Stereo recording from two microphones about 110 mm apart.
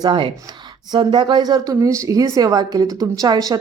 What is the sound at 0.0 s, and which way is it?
A woman's voice, 45° right (ahead or behind).